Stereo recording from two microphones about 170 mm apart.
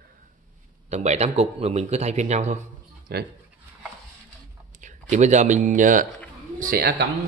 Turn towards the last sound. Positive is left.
turn(degrees=-65)  # may be behind; listen again after turning